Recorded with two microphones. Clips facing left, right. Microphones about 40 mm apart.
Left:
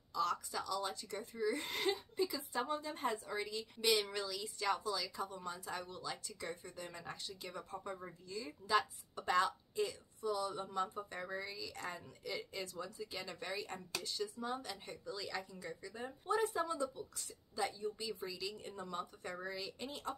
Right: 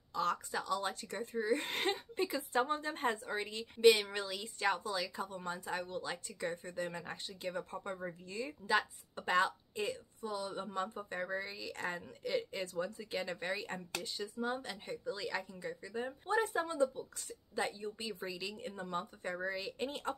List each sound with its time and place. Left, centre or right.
0.1 s speech: right
8.6 s speech: right
11.5 s speech: right